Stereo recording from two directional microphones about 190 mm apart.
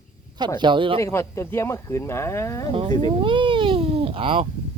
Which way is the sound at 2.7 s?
30° right (ahead or behind).